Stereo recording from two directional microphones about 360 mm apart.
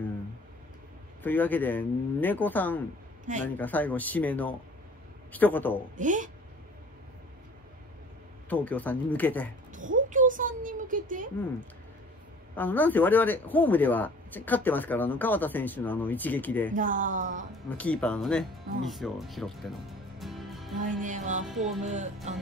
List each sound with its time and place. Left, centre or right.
1.2 s speech: centre
5.9 s speech: right
8.5 s speech: centre
9.7 s a child's voice: right
12.5 s speech: centre
16.7 s speech: right
17.6 s speech: centre
18.9 s music: centre
20.8 s speech: right
21.5 s speech: centre
21.8 s speech: centre